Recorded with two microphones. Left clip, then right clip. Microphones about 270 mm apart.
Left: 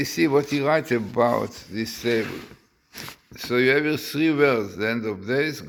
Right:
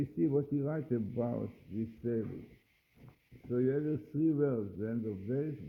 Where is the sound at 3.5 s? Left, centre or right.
Centre.